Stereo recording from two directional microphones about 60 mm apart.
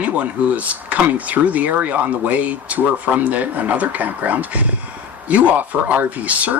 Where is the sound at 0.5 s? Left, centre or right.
Right.